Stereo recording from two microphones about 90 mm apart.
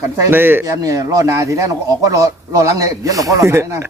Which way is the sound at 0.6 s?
40° right (ahead or behind).